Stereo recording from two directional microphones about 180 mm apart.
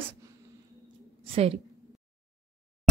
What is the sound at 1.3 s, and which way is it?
Speech, 35° right (ahead or behind).